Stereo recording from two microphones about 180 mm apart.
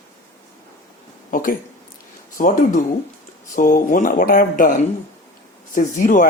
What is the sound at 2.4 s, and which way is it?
Speech, 45° left (ahead or behind).